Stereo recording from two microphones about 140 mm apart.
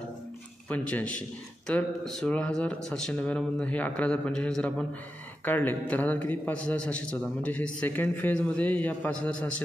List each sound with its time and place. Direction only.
0.7 s a man's voice: 10° left (ahead or behind)